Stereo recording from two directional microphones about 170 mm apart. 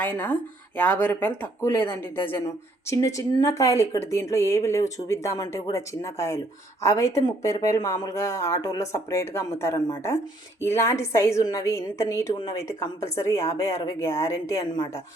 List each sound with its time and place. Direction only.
0.0 s a woman's voice: 10° left (ahead or behind)